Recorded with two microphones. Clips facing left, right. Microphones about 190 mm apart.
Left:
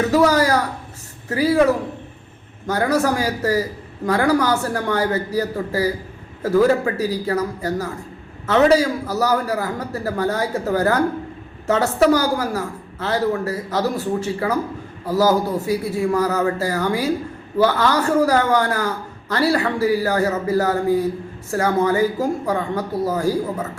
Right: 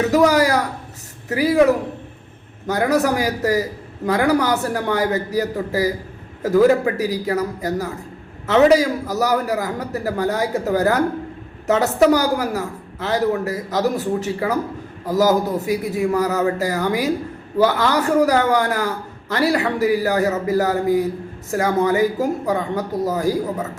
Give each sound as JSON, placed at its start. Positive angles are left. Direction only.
{"t": 0.0, "sound": "a man's voice", "side_deg": -15}